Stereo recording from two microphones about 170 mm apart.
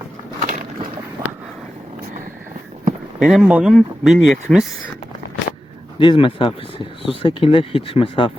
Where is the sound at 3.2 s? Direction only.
Centre (ahead or behind).